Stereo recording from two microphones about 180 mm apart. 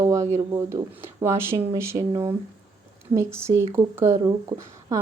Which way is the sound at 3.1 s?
15° right (ahead or behind).